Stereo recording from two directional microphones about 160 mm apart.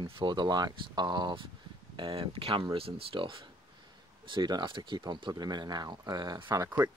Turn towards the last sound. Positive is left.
turn(degrees=-25)  # may be behind; listen again after turning